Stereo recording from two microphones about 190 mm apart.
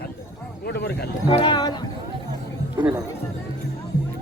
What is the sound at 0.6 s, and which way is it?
Speech, 60° left (ahead or behind).